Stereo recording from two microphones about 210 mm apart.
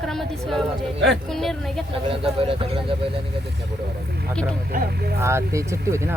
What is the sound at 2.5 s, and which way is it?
Speech, 25° right (ahead or behind).